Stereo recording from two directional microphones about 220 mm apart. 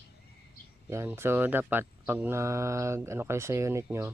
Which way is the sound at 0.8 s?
10° right (ahead or behind).